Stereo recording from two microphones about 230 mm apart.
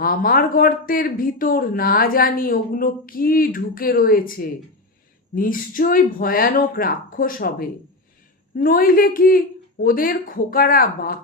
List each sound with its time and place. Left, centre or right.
0.0 s speech: left